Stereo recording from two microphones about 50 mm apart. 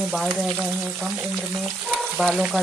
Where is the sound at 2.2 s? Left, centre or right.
Centre.